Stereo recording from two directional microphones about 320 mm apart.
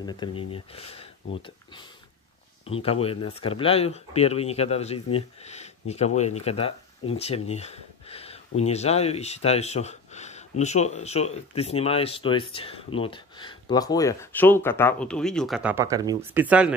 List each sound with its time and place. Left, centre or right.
0.0 s speech: centre
2.6 s speech: centre